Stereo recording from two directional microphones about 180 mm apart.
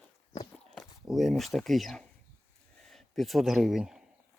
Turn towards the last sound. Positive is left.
turn(degrees=0)  # may be behind; listen again after turning